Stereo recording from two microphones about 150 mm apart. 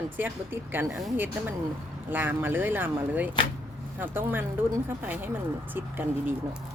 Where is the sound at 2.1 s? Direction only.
10° right (ahead or behind).